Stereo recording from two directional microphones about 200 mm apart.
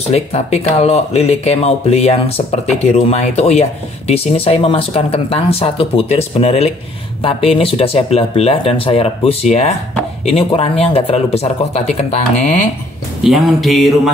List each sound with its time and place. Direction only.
0.1 s speech: 30° left (ahead or behind)
13.2 s speech: centre (ahead or behind)